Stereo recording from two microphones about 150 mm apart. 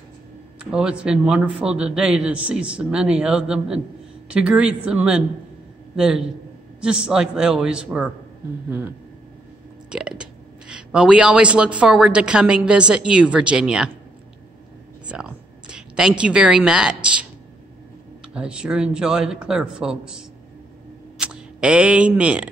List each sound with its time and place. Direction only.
0.6 s a man's voice: 5° right (ahead or behind)
15.0 s a woman's voice: 5° right (ahead or behind)
18.3 s speech: 5° right (ahead or behind)